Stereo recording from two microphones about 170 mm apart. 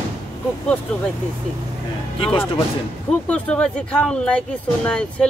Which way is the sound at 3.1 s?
5° left (ahead or behind).